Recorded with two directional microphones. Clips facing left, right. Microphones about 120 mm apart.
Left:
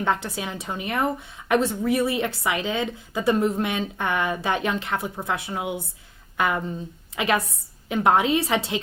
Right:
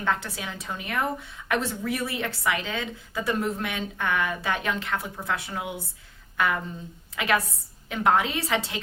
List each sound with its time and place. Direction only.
0.0 s speech: 20° left (ahead or behind)